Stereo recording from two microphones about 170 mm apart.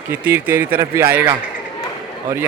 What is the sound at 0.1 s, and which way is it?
A man's voice, 10° right (ahead or behind).